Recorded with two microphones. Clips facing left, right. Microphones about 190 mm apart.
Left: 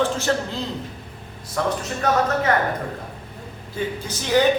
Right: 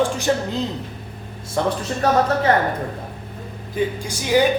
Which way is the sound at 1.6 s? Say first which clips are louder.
Right 3 dB; 25° right (ahead or behind).